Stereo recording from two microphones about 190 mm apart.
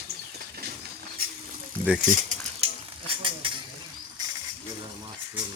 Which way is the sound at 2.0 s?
40° right (ahead or behind).